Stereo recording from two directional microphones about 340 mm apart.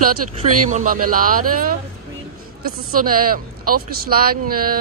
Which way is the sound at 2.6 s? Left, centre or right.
Right.